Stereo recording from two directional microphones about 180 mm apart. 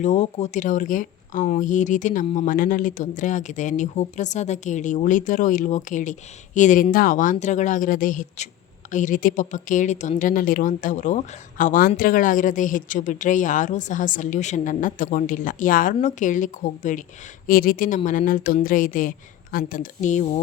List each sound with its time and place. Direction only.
0.0 s speech: 40° left (ahead or behind)